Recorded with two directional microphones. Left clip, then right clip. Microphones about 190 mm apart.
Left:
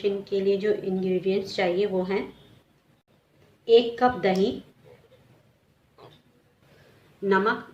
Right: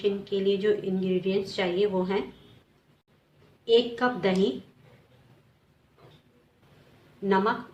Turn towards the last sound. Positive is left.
turn(degrees=-15)  # may be behind; listen again after turning